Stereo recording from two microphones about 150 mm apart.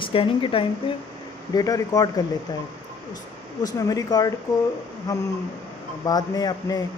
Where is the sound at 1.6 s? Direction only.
25° left (ahead or behind).